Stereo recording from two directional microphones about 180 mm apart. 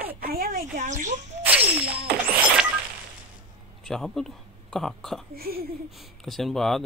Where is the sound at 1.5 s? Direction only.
5° right (ahead or behind).